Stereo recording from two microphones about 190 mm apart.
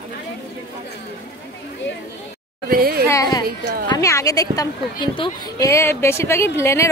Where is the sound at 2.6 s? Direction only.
50° right (ahead or behind).